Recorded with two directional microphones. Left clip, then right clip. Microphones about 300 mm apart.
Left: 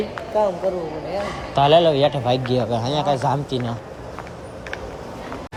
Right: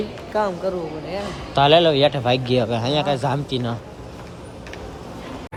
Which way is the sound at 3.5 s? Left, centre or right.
Centre.